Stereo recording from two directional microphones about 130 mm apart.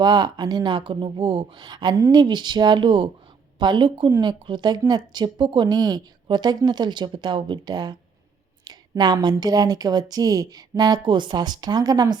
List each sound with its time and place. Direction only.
0.0 s a woman's voice: 30° right (ahead or behind)